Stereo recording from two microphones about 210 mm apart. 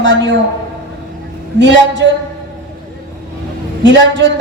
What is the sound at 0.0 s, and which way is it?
Speech, 60° right (ahead or behind).